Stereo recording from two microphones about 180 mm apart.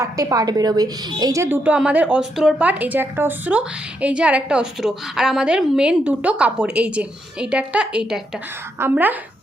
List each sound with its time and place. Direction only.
0.0 s a woman's voice: 20° right (ahead or behind)